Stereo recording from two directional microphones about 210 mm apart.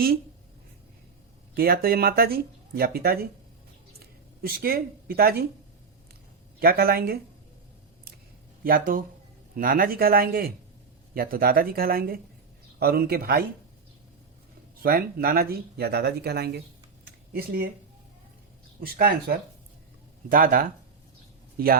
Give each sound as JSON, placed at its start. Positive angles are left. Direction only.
{"t": 1.5, "sound": "speech", "side_deg": -45}
{"t": 6.6, "sound": "speech", "side_deg": -45}
{"t": 8.6, "sound": "speech", "side_deg": -45}
{"t": 14.8, "sound": "speech", "side_deg": -45}
{"t": 17.1, "sound": "a sound", "side_deg": -45}
{"t": 18.8, "sound": "speech", "side_deg": -45}